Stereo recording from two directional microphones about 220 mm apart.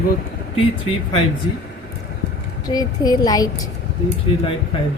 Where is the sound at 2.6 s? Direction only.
15° left (ahead or behind).